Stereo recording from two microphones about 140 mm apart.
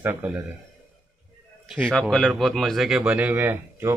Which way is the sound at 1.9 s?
5° left (ahead or behind).